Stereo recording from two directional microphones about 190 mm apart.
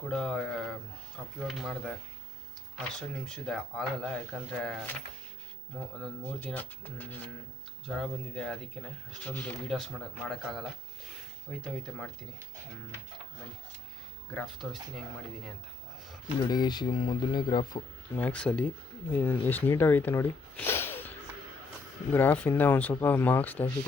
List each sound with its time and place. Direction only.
0.1 s speech: 5° left (ahead or behind)
6.0 s speech: 10° left (ahead or behind)
14.3 s speech: centre (ahead or behind)
16.4 s speech: 20° left (ahead or behind)
18.2 s speech: 5° left (ahead or behind)